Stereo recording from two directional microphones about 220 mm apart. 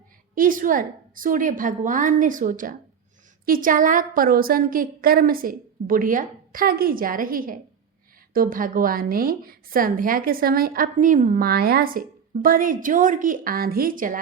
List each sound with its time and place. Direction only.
0.3 s a woman's voice: 40° right (ahead or behind)